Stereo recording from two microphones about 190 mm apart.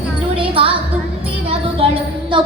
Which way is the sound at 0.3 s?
25° right (ahead or behind).